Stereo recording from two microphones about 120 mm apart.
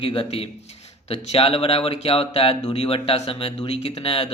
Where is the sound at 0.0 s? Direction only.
50° left (ahead or behind).